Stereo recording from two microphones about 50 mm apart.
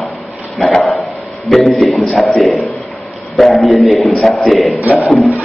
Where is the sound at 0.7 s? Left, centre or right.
Centre.